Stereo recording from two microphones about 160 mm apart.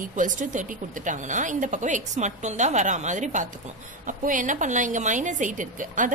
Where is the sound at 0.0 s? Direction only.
55° right (ahead or behind).